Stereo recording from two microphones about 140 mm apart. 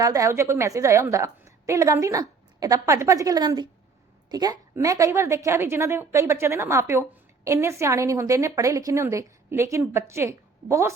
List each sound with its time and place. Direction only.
0.0 s a woman's voice: 25° right (ahead or behind)